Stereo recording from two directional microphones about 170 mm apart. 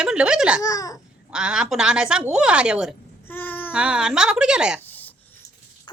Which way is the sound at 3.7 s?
5° right (ahead or behind).